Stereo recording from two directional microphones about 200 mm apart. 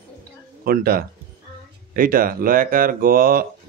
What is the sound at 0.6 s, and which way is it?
Speech, 50° right (ahead or behind).